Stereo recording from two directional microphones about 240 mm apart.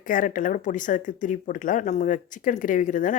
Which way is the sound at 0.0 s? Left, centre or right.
Left.